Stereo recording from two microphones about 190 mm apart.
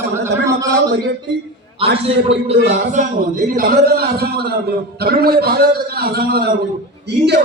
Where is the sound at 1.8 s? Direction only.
30° right (ahead or behind).